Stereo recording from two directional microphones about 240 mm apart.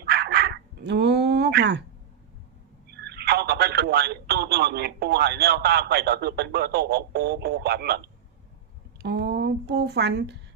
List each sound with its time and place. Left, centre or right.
0.0 s dog: right
2.9 s speech: right